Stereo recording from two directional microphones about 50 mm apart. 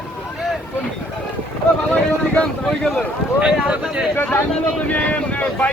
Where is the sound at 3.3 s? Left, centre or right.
Right.